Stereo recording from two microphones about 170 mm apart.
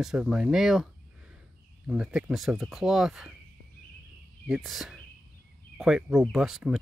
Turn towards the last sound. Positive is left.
turn(degrees=-5)  # may be behind; listen again after turning